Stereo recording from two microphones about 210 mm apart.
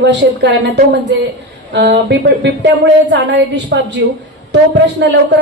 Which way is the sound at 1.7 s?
55° right (ahead or behind).